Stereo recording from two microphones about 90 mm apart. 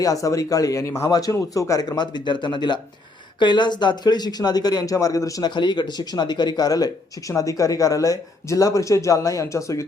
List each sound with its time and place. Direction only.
0.0 s speech: 40° left (ahead or behind)
2.0 s speech: 60° left (ahead or behind); by 5.5 s 40° left (ahead or behind)
5.5 s speech: 55° left (ahead or behind); by 9.8 s 35° left (ahead or behind)